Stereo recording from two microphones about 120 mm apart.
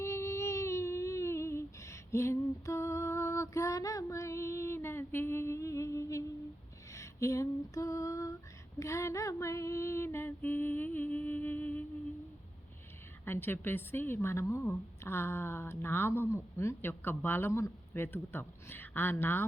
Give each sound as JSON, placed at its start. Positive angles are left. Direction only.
{"t": 0.0, "sound": "music", "side_deg": 25}
{"t": 6.9, "sound": "female singing", "side_deg": 25}
{"t": 13.2, "sound": "a woman's voice", "side_deg": 20}